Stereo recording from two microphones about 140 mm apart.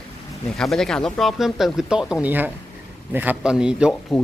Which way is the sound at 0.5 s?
5° left (ahead or behind).